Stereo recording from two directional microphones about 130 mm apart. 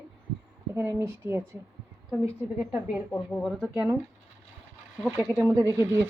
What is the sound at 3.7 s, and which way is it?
Speech, 15° right (ahead or behind).